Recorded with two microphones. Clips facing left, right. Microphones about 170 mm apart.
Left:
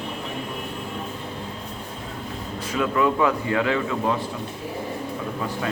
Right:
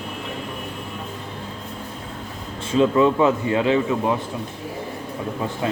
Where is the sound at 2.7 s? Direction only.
25° right (ahead or behind).